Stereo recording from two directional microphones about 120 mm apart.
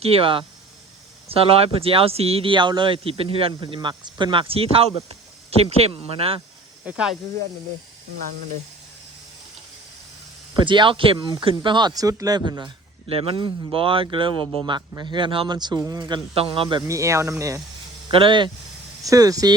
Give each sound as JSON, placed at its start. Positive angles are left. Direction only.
{"t": 0.0, "sound": "speech", "side_deg": -50}
{"t": 3.8, "sound": "speech", "side_deg": -40}
{"t": 6.8, "sound": "speech", "side_deg": -10}
{"t": 10.6, "sound": "speech", "side_deg": -40}
{"t": 16.8, "sound": "speech", "side_deg": -25}
{"t": 18.1, "sound": "speech", "side_deg": -45}
{"t": 19.0, "sound": "speech", "side_deg": -30}